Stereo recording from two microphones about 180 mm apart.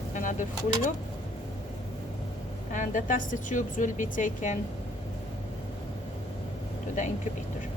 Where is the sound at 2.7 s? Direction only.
45° left (ahead or behind).